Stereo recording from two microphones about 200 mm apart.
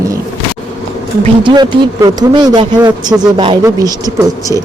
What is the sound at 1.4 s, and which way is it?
Speech, 20° right (ahead or behind).